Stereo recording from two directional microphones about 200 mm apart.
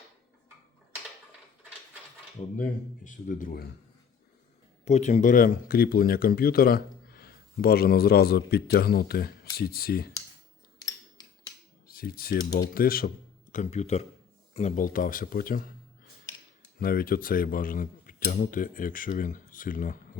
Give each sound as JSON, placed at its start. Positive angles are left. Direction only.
{"t": 2.6, "sound": "speech", "side_deg": 40}
{"t": 4.9, "sound": "speech", "side_deg": 35}
{"t": 11.9, "sound": "speech", "side_deg": 50}
{"t": 13.5, "sound": "speech", "side_deg": 35}
{"t": 16.8, "sound": "speech", "side_deg": 45}